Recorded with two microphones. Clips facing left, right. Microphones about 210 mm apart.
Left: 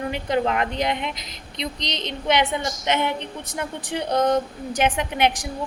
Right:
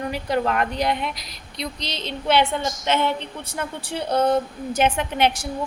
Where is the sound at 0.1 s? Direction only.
20° left (ahead or behind).